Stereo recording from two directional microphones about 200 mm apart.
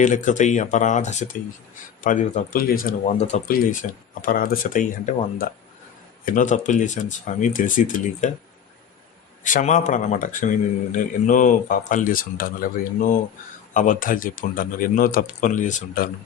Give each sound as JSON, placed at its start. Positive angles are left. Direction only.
{"t": 0.0, "sound": "speech", "side_deg": 40}
{"t": 9.4, "sound": "speech", "side_deg": 40}